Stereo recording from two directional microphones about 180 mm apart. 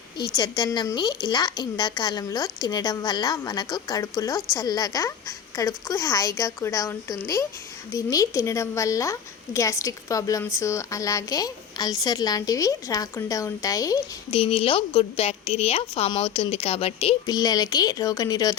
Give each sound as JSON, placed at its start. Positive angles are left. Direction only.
{"t": 0.3, "sound": "a woman's voice", "side_deg": 20}
{"t": 14.3, "sound": "a woman's voice", "side_deg": 30}
{"t": 17.2, "sound": "a woman's voice", "side_deg": 20}